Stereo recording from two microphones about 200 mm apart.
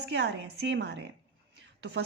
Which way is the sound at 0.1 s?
60° right (ahead or behind).